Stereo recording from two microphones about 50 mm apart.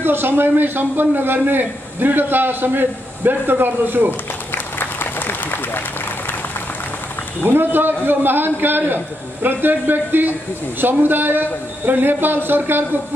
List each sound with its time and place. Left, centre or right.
0.0 s a man's voice: right
4.7 s applause: left
7.4 s a man's voice: right